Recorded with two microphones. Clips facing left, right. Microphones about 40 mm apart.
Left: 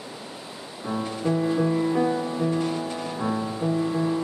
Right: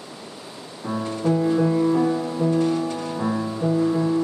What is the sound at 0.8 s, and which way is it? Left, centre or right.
Music, centre.